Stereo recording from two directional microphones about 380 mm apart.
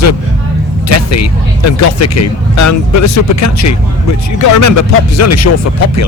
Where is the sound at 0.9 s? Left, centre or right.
Left.